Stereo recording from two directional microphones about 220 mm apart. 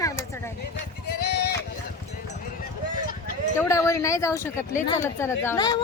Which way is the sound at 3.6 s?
10° left (ahead or behind).